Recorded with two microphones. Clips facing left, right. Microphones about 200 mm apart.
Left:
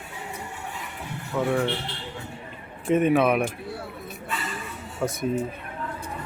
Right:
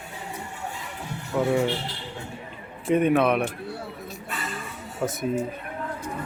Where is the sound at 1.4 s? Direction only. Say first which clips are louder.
Right 2 dB; 10° right (ahead or behind).